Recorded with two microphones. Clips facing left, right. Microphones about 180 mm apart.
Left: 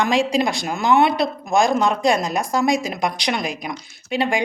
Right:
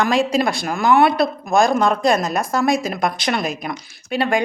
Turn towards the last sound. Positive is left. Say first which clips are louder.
# right 1 dB
turn(degrees=15)  # may be behind; listen again after turning